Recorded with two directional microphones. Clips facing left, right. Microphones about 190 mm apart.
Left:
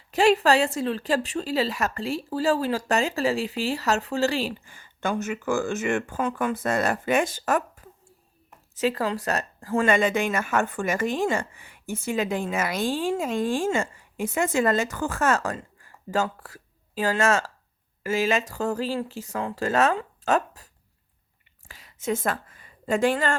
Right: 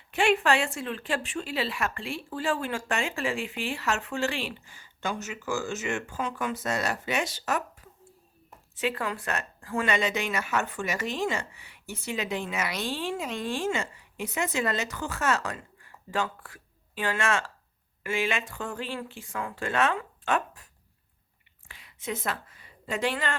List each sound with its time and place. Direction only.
0.1 s a woman's voice: 35° left (ahead or behind)
8.7 s a woman's voice: 40° left (ahead or behind)
21.7 s a woman's voice: 40° left (ahead or behind)